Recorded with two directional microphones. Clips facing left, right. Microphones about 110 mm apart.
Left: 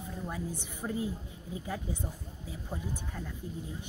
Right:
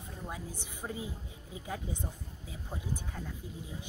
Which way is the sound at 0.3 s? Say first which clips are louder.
Left 3 dB; 15° right (ahead or behind).